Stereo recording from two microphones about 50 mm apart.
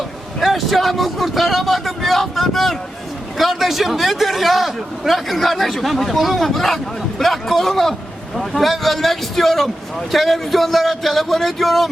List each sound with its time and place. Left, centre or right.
0.3 s a man's voice: centre